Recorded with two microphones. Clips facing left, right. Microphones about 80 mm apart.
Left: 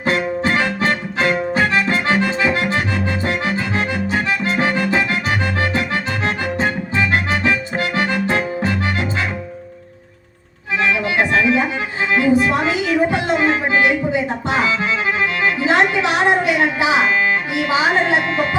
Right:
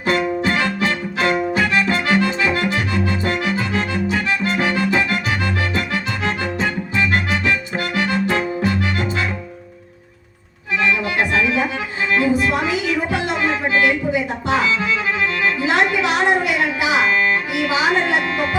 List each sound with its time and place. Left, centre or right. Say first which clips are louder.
0.0 s music: even; left
2.2 s accordion: left 1 dB; left
5.7 s music: left 2 dB; left
10.8 s music: left 1 dB; left